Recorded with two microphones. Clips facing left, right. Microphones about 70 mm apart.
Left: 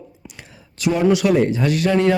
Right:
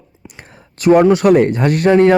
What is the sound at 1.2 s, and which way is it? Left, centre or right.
Speech, right.